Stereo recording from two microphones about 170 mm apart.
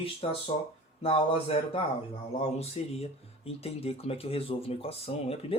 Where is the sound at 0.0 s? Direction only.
35° left (ahead or behind).